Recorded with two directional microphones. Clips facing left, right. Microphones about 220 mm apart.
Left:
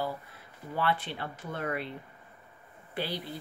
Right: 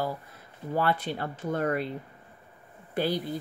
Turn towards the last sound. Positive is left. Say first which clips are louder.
# right 7 dB
turn(degrees=-45)  # may be behind; listen again after turning